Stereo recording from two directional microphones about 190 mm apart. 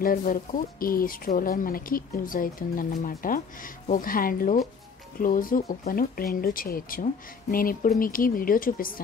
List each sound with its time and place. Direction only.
0.0 s speech: 50° left (ahead or behind)